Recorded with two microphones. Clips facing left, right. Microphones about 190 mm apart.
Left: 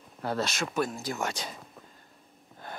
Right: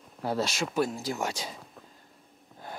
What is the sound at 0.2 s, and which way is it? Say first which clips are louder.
Speech: right 1 dB; 10° right (ahead or behind).